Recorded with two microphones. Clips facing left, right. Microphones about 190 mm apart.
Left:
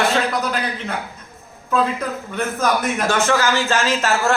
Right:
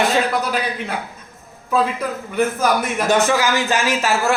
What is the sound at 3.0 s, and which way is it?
A man's voice, 15° right (ahead or behind).